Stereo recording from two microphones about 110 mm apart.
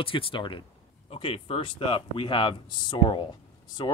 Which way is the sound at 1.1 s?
65° left (ahead or behind).